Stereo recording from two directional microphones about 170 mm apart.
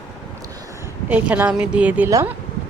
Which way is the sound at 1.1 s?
10° right (ahead or behind).